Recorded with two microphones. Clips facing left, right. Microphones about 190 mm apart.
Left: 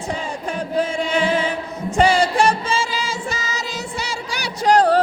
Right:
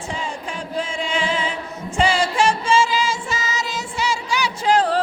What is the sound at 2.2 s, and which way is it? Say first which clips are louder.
Music: left 2 dB; 35° left (ahead or behind).